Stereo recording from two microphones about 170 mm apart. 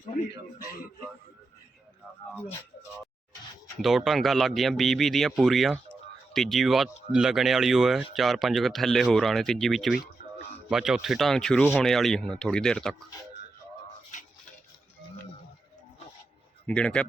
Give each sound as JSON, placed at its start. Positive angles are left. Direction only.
{"t": 3.8, "sound": "speech", "side_deg": 0}
{"t": 10.2, "sound": "a sound", "side_deg": 45}
{"t": 10.7, "sound": "speech", "side_deg": -5}
{"t": 16.6, "sound": "speech", "side_deg": 5}